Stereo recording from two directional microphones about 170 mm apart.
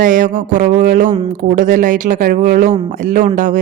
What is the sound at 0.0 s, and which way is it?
A woman's voice, 50° right (ahead or behind).